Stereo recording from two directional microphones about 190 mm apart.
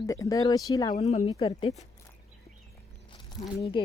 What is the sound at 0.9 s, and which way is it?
Speech, 35° left (ahead or behind).